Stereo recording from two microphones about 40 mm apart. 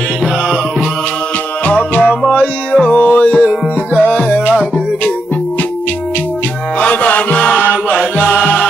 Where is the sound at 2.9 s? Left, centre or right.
Left.